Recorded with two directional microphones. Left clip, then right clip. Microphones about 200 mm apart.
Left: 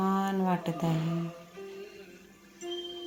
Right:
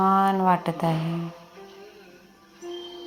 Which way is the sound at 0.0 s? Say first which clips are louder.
Right 10 dB; 5° right (ahead or behind).